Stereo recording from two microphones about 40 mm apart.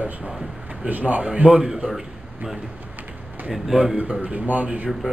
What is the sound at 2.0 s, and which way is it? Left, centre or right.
Speech, centre.